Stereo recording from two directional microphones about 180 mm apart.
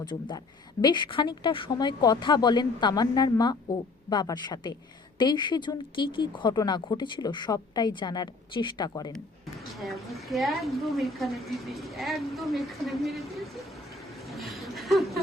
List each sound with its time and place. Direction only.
0.8 s speech: 25° left (ahead or behind)
9.8 s a woman's voice: centre (ahead or behind)
14.3 s a sound: centre (ahead or behind)